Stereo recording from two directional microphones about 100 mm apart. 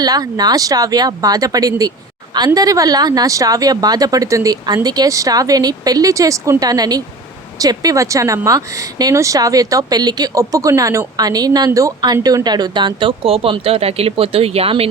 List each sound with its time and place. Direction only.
0.0 s speech: 40° right (ahead or behind); by 14.8 s 75° right (ahead or behind)